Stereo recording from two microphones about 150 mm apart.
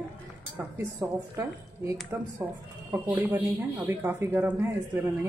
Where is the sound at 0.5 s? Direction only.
15° right (ahead or behind).